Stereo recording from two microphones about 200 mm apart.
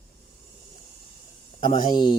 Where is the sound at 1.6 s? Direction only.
25° left (ahead or behind).